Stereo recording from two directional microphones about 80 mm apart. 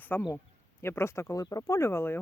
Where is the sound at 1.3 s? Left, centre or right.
Left.